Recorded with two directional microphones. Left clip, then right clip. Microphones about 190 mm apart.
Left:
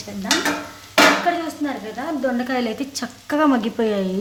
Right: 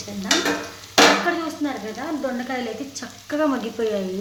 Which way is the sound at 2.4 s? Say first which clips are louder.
Left 4 dB; 40° left (ahead or behind).